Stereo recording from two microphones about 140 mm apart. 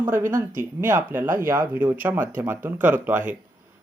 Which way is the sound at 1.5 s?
15° right (ahead or behind).